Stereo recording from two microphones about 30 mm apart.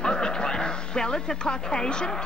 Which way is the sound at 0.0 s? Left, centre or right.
Left.